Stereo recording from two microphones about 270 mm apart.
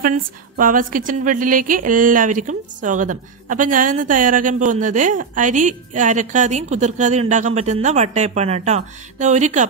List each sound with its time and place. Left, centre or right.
0.0 s a woman's voice: right